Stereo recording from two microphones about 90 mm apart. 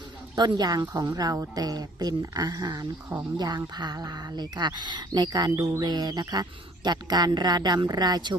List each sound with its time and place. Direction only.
0.3 s speech: 50° right (ahead or behind)